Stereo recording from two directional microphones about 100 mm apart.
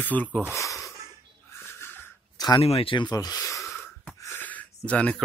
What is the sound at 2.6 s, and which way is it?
Speech, 75° left (ahead or behind).